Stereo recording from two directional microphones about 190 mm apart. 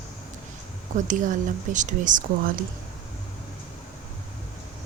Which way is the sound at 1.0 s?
45° right (ahead or behind).